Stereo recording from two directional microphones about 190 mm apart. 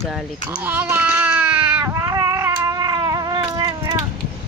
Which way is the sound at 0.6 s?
10° right (ahead or behind).